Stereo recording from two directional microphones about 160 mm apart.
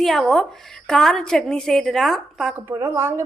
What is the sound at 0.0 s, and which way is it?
A woman's voice, centre (ahead or behind).